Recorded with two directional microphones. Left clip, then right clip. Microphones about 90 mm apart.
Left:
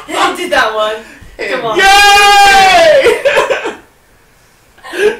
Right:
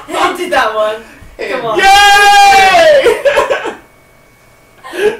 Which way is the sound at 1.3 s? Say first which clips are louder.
Left 1 dB; 15° left (ahead or behind).